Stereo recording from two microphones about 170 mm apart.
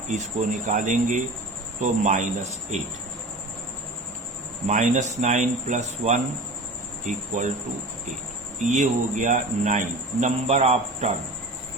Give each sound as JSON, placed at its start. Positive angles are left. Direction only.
{"t": 0.1, "sound": "speech", "side_deg": -45}
{"t": 4.6, "sound": "speech", "side_deg": -45}
{"t": 8.7, "sound": "speech", "side_deg": -45}